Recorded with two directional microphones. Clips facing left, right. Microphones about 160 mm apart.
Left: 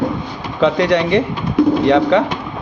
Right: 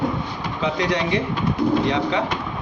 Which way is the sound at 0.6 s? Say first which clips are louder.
Left 9 dB; 65° left (ahead or behind).